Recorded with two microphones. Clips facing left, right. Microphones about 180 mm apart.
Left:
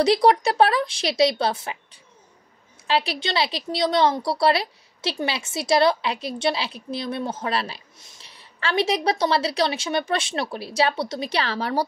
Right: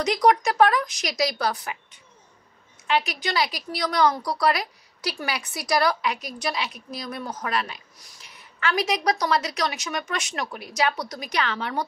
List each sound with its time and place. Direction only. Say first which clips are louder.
0.0 s a woman's voice: left 3 dB; 30° left (ahead or behind)